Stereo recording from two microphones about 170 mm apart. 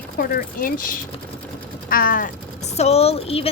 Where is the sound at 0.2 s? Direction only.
60° left (ahead or behind).